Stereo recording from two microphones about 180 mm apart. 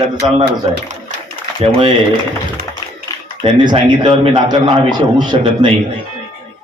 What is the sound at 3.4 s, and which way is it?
A man's voice, 25° right (ahead or behind).